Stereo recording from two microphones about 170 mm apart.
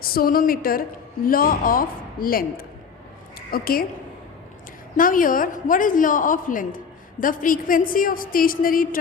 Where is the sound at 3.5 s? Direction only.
60° left (ahead or behind).